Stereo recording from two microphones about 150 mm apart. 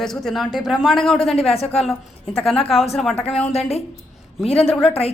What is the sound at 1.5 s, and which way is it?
Speech, 40° left (ahead or behind).